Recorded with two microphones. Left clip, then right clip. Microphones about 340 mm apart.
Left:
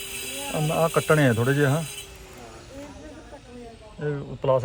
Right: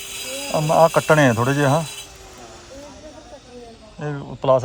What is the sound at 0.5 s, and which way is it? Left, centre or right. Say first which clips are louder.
Speech: right 8 dB; centre.